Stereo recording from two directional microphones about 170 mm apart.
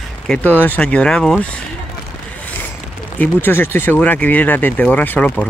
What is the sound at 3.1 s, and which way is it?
Speech, 10° left (ahead or behind).